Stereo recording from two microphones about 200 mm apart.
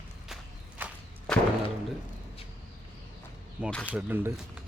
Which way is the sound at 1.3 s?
5° left (ahead or behind).